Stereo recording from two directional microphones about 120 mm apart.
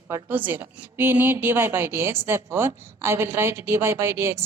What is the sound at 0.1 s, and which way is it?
A woman's voice, 15° right (ahead or behind).